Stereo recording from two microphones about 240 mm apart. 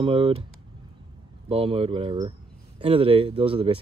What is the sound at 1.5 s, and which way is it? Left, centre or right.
Speech, right.